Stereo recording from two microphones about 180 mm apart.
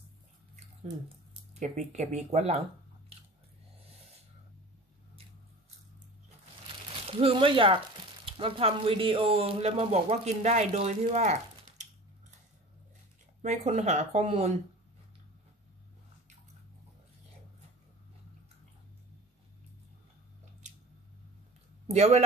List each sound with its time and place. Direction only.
1.0 s speech: 40° right (ahead or behind)
7.1 s speech: 30° right (ahead or behind)
13.4 s speech: 40° right (ahead or behind)
21.8 s speech: 35° right (ahead or behind)